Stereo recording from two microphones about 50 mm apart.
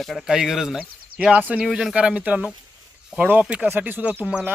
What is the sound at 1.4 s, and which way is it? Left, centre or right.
Speech, right.